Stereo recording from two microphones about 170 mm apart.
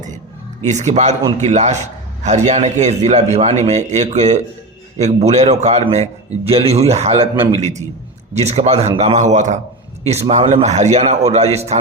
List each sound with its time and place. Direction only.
0.6 s a man's voice: 45° right (ahead or behind)